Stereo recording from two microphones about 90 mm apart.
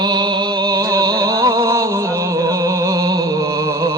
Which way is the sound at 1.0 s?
40° right (ahead or behind).